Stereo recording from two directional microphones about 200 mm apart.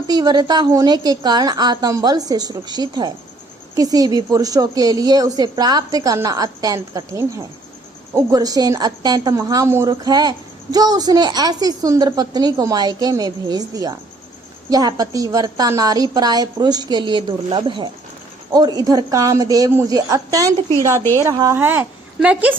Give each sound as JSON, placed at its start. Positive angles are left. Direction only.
{"t": 0.1, "sound": "a woman's voice", "side_deg": -20}